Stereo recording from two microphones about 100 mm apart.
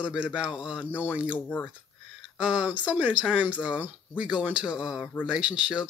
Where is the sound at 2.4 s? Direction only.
10° right (ahead or behind).